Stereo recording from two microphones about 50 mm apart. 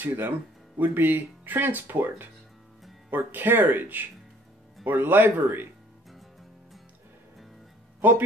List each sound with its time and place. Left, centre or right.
0.0 s speech: right